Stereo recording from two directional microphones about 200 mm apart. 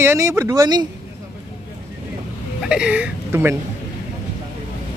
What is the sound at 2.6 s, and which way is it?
Speech, 5° right (ahead or behind).